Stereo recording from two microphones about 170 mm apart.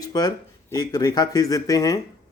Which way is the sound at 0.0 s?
25° left (ahead or behind).